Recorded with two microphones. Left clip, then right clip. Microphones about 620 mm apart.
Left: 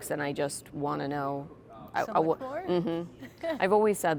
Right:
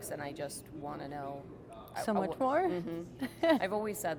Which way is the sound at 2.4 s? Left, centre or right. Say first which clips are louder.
Right 7 dB; right.